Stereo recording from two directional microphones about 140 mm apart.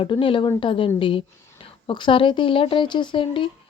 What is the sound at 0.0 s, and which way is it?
Speech, 35° left (ahead or behind).